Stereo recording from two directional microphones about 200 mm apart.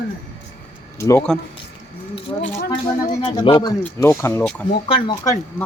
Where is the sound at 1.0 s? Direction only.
15° left (ahead or behind).